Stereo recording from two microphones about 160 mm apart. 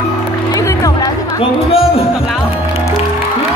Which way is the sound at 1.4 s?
35° left (ahead or behind).